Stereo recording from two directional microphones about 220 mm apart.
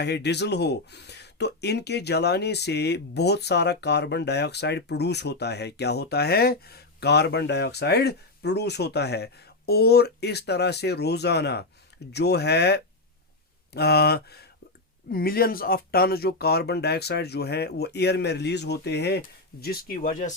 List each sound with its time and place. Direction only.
0.0 s speech: 50° left (ahead or behind)